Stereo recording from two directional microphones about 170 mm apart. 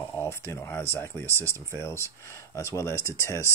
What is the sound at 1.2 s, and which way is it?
Speech, 15° right (ahead or behind).